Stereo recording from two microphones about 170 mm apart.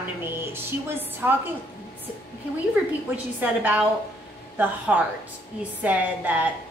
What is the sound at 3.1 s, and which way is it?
A woman's voice, 10° right (ahead or behind).